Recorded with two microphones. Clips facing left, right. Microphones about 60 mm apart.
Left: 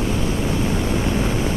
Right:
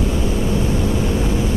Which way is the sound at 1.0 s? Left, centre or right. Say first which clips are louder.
Right 1 dB; left.